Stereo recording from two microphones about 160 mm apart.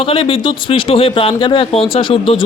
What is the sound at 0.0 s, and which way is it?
Speech, 35° left (ahead or behind).